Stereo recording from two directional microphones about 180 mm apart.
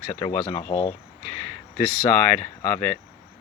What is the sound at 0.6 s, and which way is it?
Speech, 40° left (ahead or behind).